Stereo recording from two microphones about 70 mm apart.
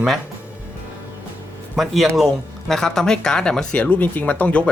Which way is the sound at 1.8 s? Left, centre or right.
Centre.